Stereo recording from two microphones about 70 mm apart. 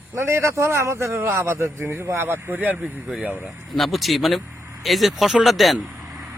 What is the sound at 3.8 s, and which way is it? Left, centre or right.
Speech, centre.